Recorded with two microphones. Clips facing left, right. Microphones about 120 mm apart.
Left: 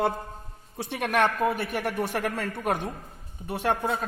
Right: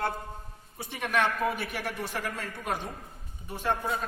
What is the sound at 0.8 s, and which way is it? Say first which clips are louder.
A woman's voice: left 4 dB; 75° left (ahead or behind).